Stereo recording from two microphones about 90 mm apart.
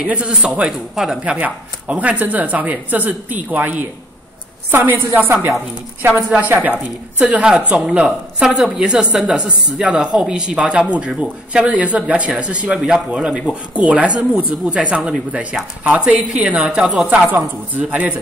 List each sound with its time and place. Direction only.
0.0 s a woman's voice: 15° right (ahead or behind)